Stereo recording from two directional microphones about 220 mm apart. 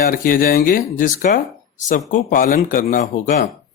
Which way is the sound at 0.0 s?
40° left (ahead or behind).